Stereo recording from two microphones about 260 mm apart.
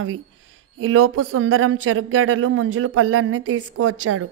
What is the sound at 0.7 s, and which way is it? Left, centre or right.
Speech, right.